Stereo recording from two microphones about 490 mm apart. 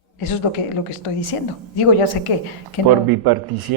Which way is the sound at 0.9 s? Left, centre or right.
Left.